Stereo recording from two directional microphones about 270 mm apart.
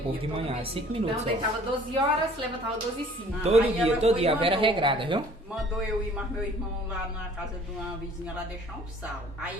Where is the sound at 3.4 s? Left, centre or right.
Right.